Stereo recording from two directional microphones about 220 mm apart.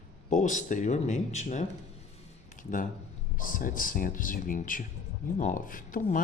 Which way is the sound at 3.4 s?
40° left (ahead or behind).